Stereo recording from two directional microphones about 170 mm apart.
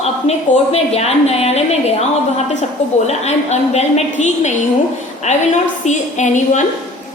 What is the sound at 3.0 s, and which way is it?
A woman's voice, 40° left (ahead or behind).